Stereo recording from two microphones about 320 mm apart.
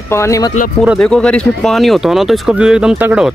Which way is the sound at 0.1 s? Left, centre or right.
Centre.